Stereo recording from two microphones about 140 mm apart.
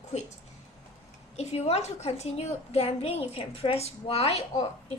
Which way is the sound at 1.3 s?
50° left (ahead or behind).